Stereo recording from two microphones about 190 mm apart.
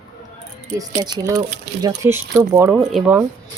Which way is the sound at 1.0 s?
20° right (ahead or behind).